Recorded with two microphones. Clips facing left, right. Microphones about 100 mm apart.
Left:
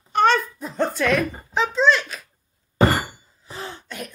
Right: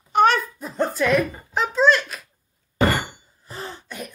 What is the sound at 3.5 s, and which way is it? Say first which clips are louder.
Throat clearing: even; centre (ahead or behind).